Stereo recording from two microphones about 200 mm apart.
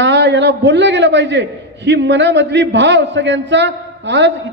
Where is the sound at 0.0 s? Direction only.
60° right (ahead or behind).